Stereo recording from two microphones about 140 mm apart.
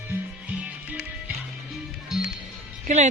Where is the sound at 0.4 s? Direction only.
10° right (ahead or behind).